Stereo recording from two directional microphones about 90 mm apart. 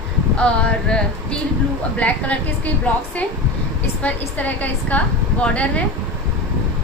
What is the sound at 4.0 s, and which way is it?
A woman's voice, 15° left (ahead or behind).